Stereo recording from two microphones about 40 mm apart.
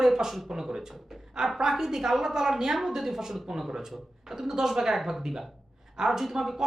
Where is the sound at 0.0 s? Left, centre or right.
Centre.